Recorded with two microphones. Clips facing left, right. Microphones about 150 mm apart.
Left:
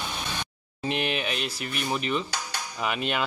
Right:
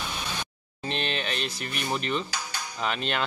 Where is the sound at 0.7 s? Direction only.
10° left (ahead or behind).